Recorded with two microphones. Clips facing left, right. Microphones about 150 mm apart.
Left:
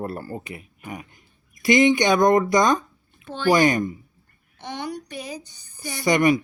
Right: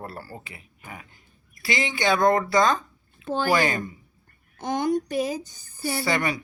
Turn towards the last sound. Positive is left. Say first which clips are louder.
# left 7 dB
turn(degrees=15)  # may be behind; listen again after turning